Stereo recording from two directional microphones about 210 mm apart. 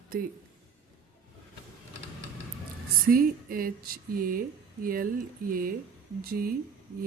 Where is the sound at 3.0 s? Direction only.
45° right (ahead or behind).